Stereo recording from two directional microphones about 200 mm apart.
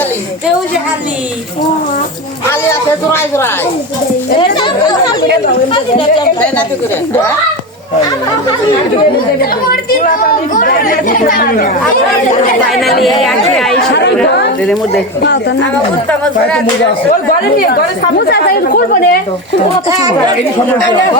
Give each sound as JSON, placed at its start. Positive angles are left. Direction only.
{"t": 2.5, "sound": "a man's voice", "side_deg": 10}
{"t": 4.4, "sound": "a sound", "side_deg": 25}
{"t": 5.7, "sound": "speech", "side_deg": 25}
{"t": 10.0, "sound": "speech", "side_deg": 40}
{"t": 12.8, "sound": "speech", "side_deg": 0}
{"t": 15.2, "sound": "a woman's voice", "side_deg": 60}
{"t": 18.2, "sound": "speech", "side_deg": 55}